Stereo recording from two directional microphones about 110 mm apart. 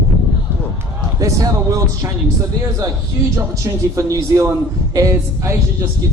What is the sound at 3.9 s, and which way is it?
A man's voice, 30° right (ahead or behind).